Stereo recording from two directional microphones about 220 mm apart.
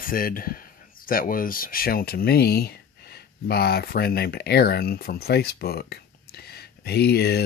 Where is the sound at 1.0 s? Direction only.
40° left (ahead or behind).